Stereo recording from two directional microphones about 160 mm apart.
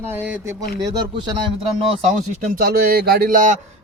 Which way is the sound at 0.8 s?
25° right (ahead or behind).